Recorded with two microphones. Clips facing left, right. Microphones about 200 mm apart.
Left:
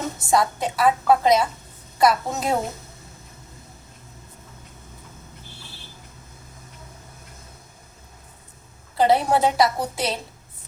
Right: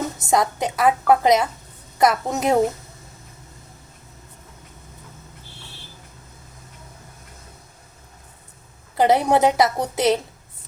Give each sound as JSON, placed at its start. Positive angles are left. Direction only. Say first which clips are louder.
{"t": 0.2, "sound": "a woman's voice", "louder": "even", "side_deg": -20}
{"t": 9.0, "sound": "a woman's voice", "louder": "right 2 dB", "side_deg": -20}